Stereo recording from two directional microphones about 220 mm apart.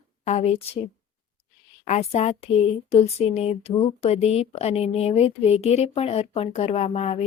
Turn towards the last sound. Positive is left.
turn(degrees=30)  # may be behind; listen again after turning